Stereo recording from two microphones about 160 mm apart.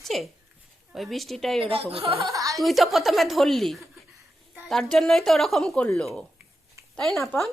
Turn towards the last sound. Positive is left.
turn(degrees=0)  # may be behind; listen again after turning